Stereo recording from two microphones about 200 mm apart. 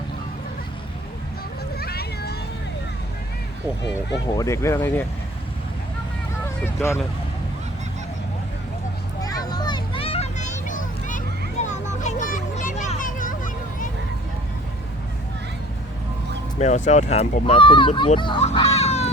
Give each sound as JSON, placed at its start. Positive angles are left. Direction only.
{"t": 1.8, "sound": "vehicle", "side_deg": 50}
{"t": 4.4, "sound": "speech", "side_deg": 15}
{"t": 9.2, "sound": "a sound", "side_deg": 20}
{"t": 16.6, "sound": "speech", "side_deg": 35}
{"t": 18.3, "sound": "music", "side_deg": 30}